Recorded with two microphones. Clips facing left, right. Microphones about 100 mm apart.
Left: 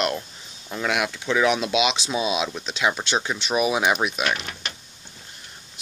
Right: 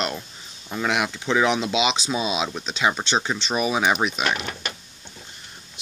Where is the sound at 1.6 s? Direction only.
5° left (ahead or behind).